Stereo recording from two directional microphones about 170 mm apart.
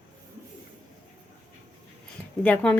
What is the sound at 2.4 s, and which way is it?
Speech, 10° left (ahead or behind).